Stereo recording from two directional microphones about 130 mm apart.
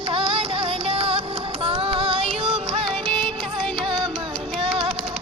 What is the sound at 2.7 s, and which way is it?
Music, 45° right (ahead or behind).